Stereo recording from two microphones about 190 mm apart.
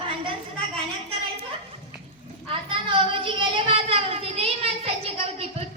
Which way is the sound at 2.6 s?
25° right (ahead or behind).